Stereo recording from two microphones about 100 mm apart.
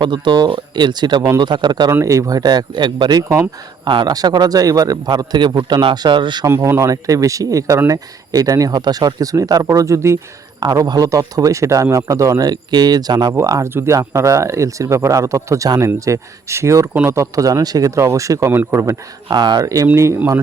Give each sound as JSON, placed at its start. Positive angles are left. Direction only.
{"t": 0.0, "sound": "speech", "side_deg": -50}
{"t": 1.9, "sound": "a man's voice", "side_deg": -30}
{"t": 6.6, "sound": "a man's voice", "side_deg": -30}
{"t": 10.6, "sound": "a man's voice", "side_deg": -40}
{"t": 19.3, "sound": "speech", "side_deg": -45}